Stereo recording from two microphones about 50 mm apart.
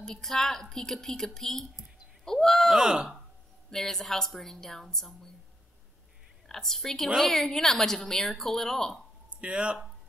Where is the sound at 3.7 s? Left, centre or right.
Centre.